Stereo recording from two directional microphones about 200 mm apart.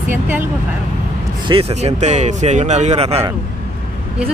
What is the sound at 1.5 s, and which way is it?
Speech, 30° right (ahead or behind).